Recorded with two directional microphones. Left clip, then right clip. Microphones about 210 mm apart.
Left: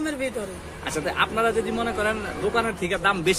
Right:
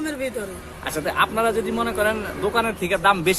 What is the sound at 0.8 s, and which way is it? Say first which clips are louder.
Speech: right 3 dB; 25° right (ahead or behind).